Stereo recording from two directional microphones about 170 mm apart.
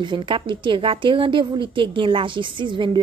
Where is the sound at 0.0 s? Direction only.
30° right (ahead or behind).